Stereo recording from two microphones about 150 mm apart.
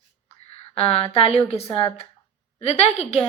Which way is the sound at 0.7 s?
40° left (ahead or behind).